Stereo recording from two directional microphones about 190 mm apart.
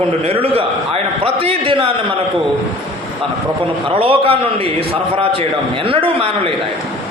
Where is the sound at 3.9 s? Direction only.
30° right (ahead or behind).